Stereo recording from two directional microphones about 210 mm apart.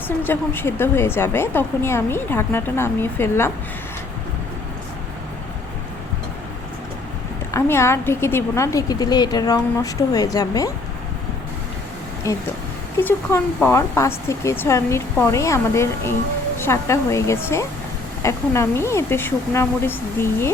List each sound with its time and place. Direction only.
0.2 s a woman's voice: 10° left (ahead or behind)
7.5 s a woman's voice: 15° left (ahead or behind)
12.3 s a woman's voice: 15° left (ahead or behind)